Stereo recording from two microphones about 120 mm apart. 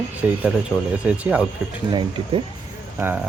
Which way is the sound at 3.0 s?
15° right (ahead or behind).